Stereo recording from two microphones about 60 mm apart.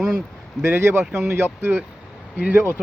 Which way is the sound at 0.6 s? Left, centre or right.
Right.